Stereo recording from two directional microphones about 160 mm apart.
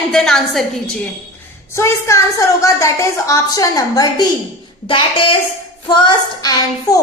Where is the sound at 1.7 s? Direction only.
20° left (ahead or behind).